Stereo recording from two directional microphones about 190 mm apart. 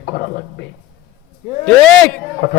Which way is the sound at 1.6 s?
5° left (ahead or behind).